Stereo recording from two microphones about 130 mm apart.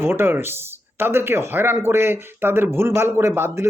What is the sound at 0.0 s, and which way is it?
Speech, 15° right (ahead or behind).